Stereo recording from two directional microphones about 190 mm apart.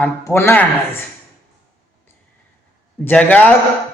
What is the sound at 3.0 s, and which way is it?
Speech, 10° left (ahead or behind).